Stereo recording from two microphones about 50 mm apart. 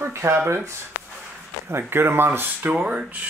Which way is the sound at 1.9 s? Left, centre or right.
Right.